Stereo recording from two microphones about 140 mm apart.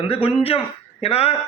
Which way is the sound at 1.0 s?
45° left (ahead or behind).